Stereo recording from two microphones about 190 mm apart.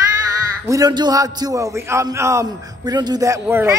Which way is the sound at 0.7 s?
20° right (ahead or behind).